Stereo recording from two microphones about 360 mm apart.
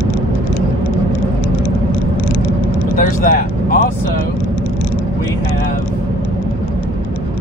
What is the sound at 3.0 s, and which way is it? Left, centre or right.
Vehicle, left.